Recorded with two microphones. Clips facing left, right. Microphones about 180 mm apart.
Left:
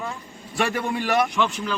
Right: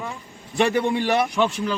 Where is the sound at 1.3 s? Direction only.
35° right (ahead or behind).